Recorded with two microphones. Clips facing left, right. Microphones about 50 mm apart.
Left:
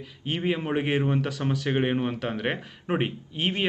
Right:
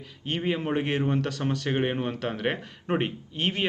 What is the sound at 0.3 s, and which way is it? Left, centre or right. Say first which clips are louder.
Speech: left 1 dB; centre.